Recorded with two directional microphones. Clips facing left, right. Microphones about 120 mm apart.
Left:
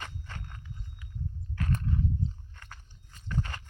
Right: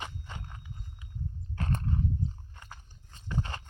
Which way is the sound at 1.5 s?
35° right (ahead or behind).